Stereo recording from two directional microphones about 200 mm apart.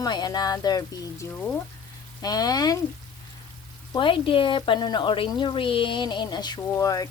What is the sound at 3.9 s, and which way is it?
Speech, 25° left (ahead or behind).